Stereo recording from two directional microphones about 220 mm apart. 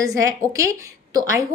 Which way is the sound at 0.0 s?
15° right (ahead or behind).